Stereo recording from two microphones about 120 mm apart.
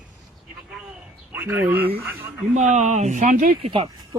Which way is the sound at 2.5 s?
75° right (ahead or behind).